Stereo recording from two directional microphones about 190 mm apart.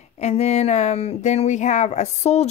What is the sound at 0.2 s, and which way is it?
Speech, 35° left (ahead or behind).